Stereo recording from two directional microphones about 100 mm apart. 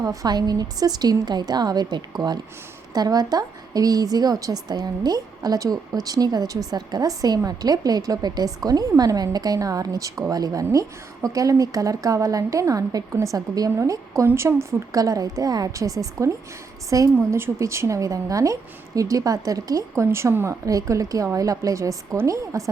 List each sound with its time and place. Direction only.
0.0 s a woman's voice: 35° right (ahead or behind)